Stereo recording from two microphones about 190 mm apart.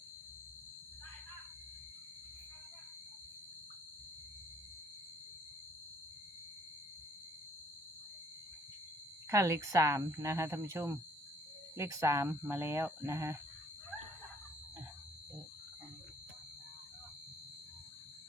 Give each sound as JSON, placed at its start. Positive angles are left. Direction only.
{"t": 9.3, "sound": "speech", "side_deg": -15}